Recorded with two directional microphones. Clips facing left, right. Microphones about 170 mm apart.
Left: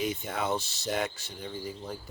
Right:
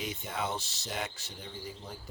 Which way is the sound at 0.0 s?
50° left (ahead or behind).